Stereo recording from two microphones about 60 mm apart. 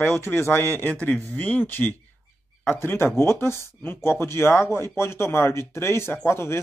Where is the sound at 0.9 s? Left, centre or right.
Left.